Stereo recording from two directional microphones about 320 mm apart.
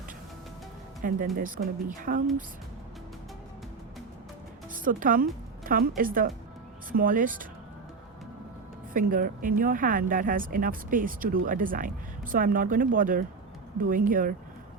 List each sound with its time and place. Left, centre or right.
1.0 s speech: right
4.7 s a woman's voice: right
8.9 s speech: right